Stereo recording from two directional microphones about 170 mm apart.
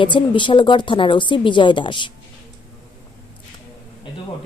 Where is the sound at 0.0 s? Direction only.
30° left (ahead or behind).